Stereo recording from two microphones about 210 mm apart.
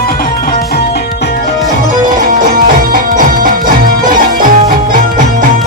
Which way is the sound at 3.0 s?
40° right (ahead or behind).